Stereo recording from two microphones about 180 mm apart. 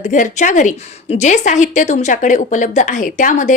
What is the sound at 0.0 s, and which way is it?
A woman's voice, 45° left (ahead or behind).